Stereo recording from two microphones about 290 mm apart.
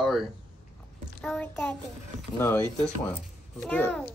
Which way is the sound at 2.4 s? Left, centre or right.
Centre.